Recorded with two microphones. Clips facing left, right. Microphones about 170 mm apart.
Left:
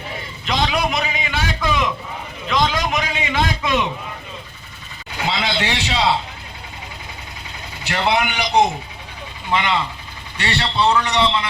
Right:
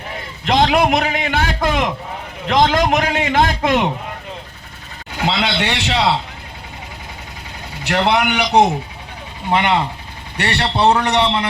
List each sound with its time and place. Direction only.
0.4 s a man's voice: 60° right (ahead or behind)
5.2 s a man's voice: 65° right (ahead or behind)
7.9 s a man's voice: 65° right (ahead or behind)